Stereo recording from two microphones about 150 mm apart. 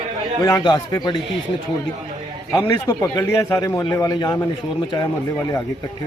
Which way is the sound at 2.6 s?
20° left (ahead or behind).